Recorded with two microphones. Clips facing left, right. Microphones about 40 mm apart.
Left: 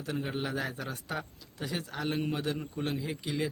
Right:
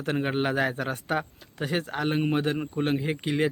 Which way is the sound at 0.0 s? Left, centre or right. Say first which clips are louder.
Right 8 dB; right.